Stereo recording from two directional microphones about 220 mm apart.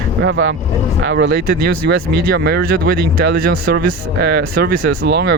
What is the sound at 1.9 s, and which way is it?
Speech, 45° right (ahead or behind).